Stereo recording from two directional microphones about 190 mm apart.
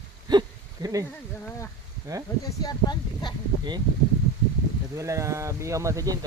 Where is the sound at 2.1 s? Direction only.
20° right (ahead or behind).